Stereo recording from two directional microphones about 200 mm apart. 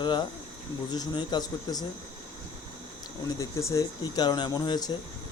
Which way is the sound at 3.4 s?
15° left (ahead or behind).